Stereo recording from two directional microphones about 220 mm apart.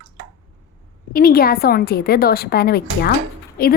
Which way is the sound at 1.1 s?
40° left (ahead or behind).